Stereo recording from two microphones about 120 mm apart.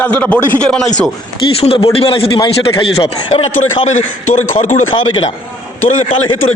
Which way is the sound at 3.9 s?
90° left.